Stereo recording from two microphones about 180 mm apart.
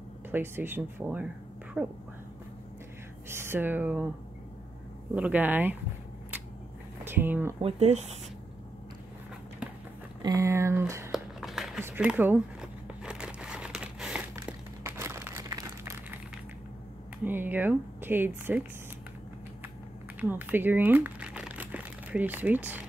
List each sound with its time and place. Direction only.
0.3 s speech: 10° right (ahead or behind)
3.3 s speech: 15° right (ahead or behind)
5.1 s speech: 10° right (ahead or behind)
7.1 s speech: 10° right (ahead or behind)
7.6 s speech: 35° right (ahead or behind)
10.2 s speech: 15° right (ahead or behind)
11.1 s a sound: centre (ahead or behind)
11.8 s speech: 10° right (ahead or behind)
12.8 s crumpling: 5° right (ahead or behind)
14.3 s a sound: 15° right (ahead or behind)
17.2 s speech: 10° right (ahead or behind)
20.2 s crumpling: 10° right (ahead or behind)